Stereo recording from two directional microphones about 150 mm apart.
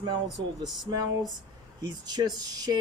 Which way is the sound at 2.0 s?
25° right (ahead or behind).